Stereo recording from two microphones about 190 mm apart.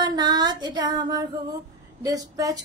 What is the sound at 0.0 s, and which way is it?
Child singing, 20° right (ahead or behind).